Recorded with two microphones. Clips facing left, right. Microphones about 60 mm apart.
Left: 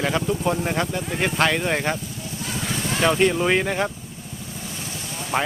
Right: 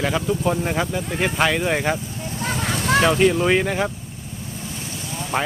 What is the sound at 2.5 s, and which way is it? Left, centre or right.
Boat, right.